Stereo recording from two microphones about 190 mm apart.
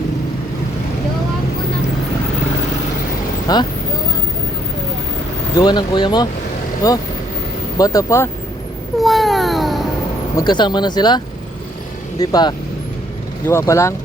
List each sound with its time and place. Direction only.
3.4 s speech: 20° left (ahead or behind)
5.5 s speech: 20° left (ahead or behind)
9.0 s a sound: centre (ahead or behind)
10.3 s speech: 25° left (ahead or behind)
12.2 s speech: 20° left (ahead or behind)